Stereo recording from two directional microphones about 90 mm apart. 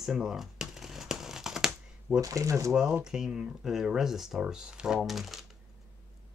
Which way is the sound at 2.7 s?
10° right (ahead or behind).